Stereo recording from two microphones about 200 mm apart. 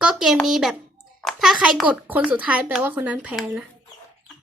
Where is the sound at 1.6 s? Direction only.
5° right (ahead or behind).